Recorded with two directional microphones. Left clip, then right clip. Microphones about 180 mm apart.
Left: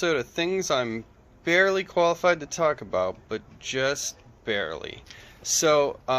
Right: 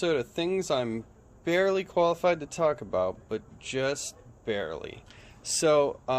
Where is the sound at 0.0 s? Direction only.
10° right (ahead or behind).